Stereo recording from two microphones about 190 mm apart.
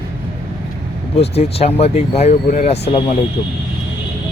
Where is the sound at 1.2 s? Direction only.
35° left (ahead or behind).